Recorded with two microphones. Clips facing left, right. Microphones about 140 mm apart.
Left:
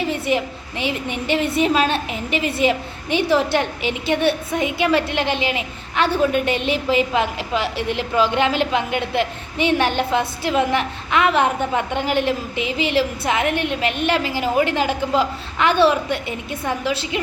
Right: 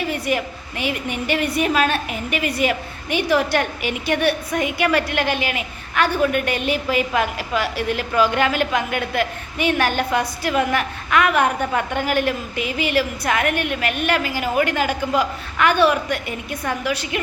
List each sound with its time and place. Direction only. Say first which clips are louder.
0.1 s a woman's voice: left 2 dB; 25° left (ahead or behind)